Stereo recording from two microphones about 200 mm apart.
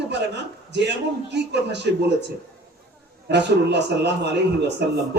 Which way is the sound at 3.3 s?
60° right (ahead or behind).